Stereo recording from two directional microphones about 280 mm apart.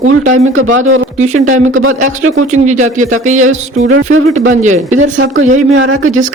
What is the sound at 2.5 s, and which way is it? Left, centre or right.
Speech, right.